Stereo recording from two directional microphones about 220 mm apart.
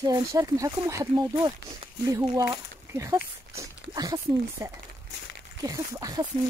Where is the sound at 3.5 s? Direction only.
15° right (ahead or behind).